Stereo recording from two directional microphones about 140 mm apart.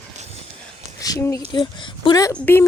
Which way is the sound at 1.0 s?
25° left (ahead or behind).